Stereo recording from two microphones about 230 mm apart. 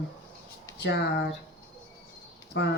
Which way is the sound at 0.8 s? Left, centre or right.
Left.